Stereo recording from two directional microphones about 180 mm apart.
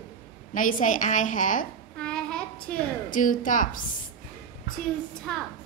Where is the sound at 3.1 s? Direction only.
45° left (ahead or behind).